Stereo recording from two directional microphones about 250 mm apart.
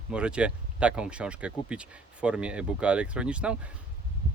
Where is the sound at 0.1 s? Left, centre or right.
Centre.